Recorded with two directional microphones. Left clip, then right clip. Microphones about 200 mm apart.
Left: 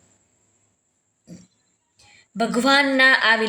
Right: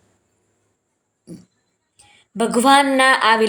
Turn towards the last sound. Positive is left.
turn(degrees=-20)  # may be behind; listen again after turning